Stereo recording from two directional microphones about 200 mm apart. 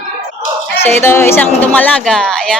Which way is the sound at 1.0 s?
10° left (ahead or behind).